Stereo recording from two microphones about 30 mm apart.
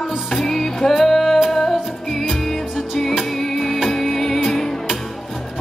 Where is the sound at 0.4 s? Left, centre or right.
Centre.